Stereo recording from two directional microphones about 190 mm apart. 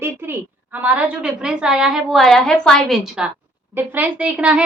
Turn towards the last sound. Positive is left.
turn(degrees=-5)  # may be behind; listen again after turning